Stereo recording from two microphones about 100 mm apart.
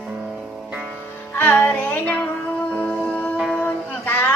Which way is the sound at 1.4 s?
20° left (ahead or behind).